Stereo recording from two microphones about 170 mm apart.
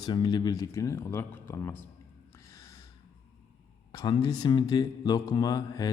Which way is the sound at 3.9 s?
20° left (ahead or behind).